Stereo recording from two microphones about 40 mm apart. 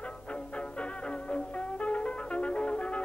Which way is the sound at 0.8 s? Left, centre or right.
Left.